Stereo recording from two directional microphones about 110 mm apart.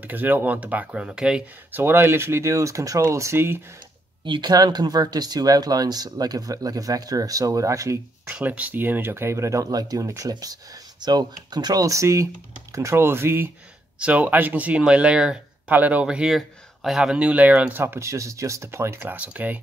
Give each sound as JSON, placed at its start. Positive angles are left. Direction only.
{"t": 0.0, "sound": "speech", "side_deg": -15}
{"t": 4.2, "sound": "speech", "side_deg": -45}
{"t": 8.4, "sound": "speech", "side_deg": -15}
{"t": 13.9, "sound": "speech", "side_deg": -10}